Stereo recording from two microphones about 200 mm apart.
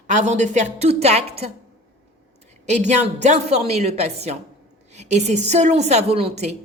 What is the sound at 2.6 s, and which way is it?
A woman's voice, 35° right (ahead or behind).